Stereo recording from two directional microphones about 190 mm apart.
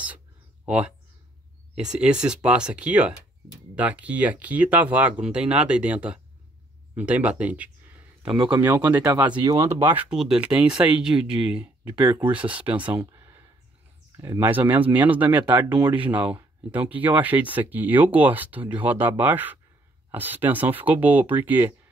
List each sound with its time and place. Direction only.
0.7 s speech: 5° right (ahead or behind)
13.0 s a sound: 15° right (ahead or behind)
14.1 s speech: 15° right (ahead or behind)